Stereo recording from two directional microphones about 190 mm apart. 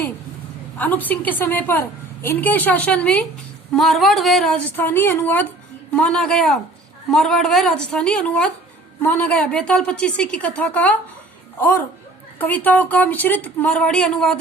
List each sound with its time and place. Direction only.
0.8 s a woman's voice: 10° left (ahead or behind)
12.4 s a woman's voice: 10° left (ahead or behind)